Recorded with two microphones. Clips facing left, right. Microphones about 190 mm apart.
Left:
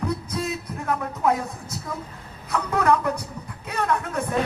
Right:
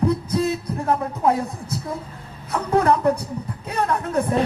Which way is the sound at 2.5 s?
30° right (ahead or behind).